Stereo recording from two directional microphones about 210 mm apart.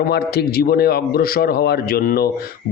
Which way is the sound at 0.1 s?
50° left (ahead or behind).